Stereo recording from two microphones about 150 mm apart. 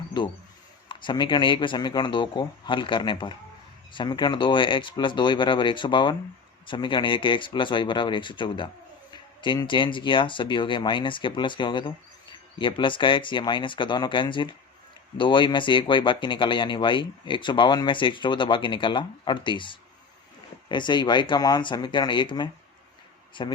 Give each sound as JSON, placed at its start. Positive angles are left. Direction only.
{"t": 0.2, "sound": "speech", "side_deg": 30}